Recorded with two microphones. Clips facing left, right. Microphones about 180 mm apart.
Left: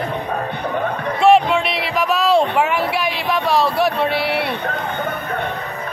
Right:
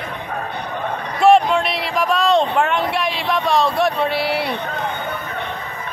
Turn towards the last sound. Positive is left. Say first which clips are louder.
# left 1 dB
turn(degrees=0)  # may be behind; listen again after turning